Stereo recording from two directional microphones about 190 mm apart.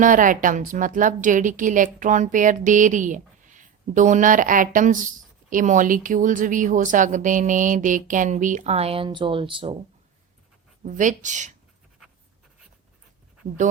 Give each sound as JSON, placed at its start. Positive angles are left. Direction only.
{"t": 0.0, "sound": "a woman's voice", "side_deg": -45}
{"t": 10.8, "sound": "speech", "side_deg": -40}